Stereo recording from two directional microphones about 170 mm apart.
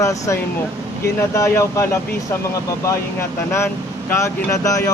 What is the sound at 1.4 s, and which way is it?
Speech, 15° left (ahead or behind).